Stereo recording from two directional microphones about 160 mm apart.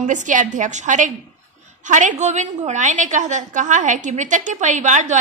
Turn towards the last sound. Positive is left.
turn(degrees=-50)  # may be behind; listen again after turning